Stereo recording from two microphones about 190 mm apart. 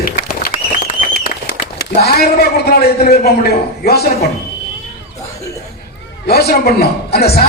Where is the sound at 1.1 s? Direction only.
60° left (ahead or behind).